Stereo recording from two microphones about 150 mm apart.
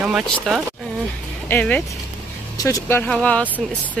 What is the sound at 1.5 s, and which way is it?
Speech, 10° left (ahead or behind).